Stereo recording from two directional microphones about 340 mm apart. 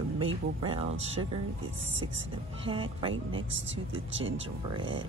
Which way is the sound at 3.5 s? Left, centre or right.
Right.